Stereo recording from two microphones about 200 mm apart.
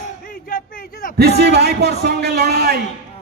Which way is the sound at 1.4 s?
55° right (ahead or behind).